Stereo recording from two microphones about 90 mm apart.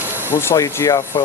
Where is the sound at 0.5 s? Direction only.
40° left (ahead or behind).